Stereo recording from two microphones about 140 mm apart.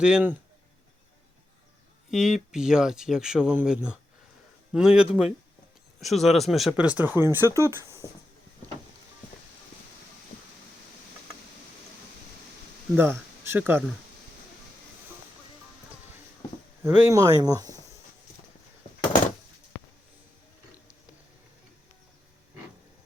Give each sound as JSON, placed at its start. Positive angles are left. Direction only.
{"t": 0.0, "sound": "speech", "side_deg": -10}
{"t": 2.0, "sound": "speech", "side_deg": -5}
{"t": 13.0, "sound": "speech", "side_deg": -15}
{"t": 16.8, "sound": "speech", "side_deg": -15}
{"t": 17.2, "sound": "speech", "side_deg": -25}